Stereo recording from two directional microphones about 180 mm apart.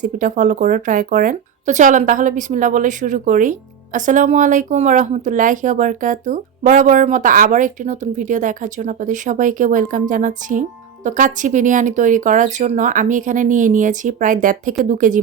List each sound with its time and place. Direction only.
0.0 s speech: 45° right (ahead or behind)